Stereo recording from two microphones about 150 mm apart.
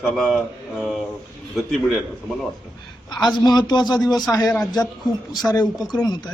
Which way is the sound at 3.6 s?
25° left (ahead or behind).